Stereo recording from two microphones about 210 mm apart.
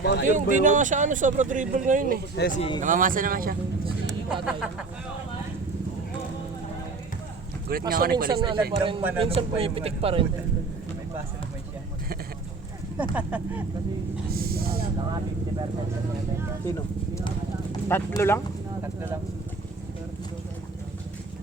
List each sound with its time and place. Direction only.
0.0 s speech: 55° left (ahead or behind)
0.3 s speech: 35° right (ahead or behind)
2.6 s speech: 25° left (ahead or behind)
2.8 s speech: 40° right (ahead or behind)
4.0 s speech: centre (ahead or behind)
7.7 s speech: 45° right (ahead or behind)
8.3 s a man's voice: 20° right (ahead or behind)
13.0 s speech: 5° right (ahead or behind)
14.3 s speech: 45° right (ahead or behind)
16.6 s clip-clop: 15° left (ahead or behind)